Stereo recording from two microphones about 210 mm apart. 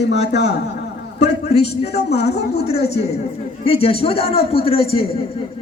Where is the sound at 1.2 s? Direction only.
30° left (ahead or behind).